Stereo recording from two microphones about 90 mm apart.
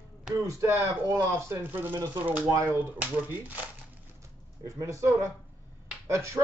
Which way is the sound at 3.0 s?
20° right (ahead or behind).